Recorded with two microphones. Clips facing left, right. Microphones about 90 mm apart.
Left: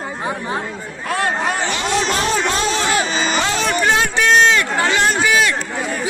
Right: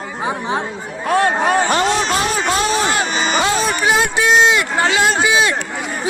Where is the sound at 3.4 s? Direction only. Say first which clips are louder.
Right 1 dB; 10° right (ahead or behind).